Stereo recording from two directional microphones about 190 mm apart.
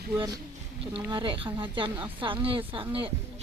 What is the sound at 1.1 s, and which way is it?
Speech, 25° right (ahead or behind).